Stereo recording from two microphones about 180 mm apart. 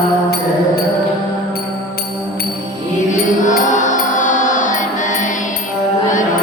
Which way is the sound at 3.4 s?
45° left (ahead or behind).